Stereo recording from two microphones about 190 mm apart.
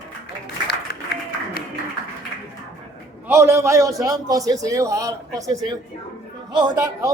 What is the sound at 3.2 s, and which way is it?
A man's voice, 15° right (ahead or behind).